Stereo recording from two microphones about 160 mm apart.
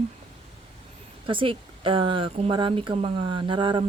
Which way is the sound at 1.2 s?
35° right (ahead or behind).